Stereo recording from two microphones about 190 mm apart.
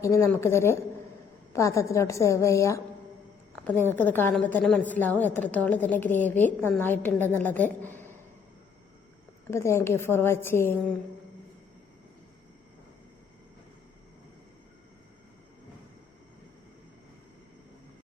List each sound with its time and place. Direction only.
0.0 s a woman's voice: 15° left (ahead or behind)
9.5 s a woman's voice: 15° left (ahead or behind)